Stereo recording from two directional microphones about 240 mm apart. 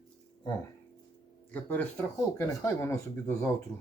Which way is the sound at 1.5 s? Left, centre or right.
Centre.